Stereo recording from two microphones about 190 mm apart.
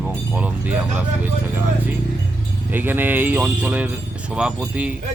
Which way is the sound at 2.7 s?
10° right (ahead or behind).